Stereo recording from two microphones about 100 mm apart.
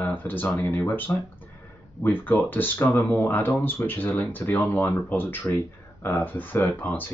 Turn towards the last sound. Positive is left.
turn(degrees=20)  # may be behind; listen again after turning